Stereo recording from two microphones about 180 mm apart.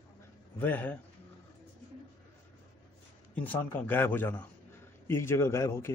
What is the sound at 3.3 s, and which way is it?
A man's voice, 10° left (ahead or behind).